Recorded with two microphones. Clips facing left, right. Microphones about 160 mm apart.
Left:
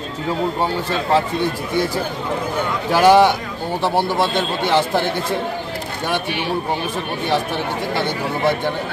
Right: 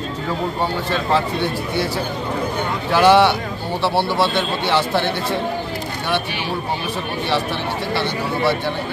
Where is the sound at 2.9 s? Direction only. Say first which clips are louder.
Left 1 dB; 45° left (ahead or behind).